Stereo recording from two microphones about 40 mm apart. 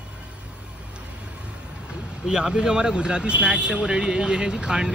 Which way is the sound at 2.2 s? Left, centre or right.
Centre.